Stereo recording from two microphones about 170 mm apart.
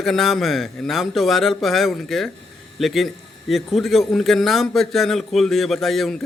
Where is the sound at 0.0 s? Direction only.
Centre (ahead or behind).